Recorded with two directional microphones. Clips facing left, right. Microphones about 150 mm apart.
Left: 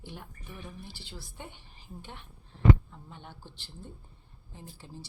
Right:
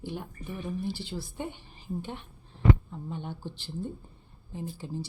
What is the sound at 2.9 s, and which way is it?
A woman's voice, 20° right (ahead or behind).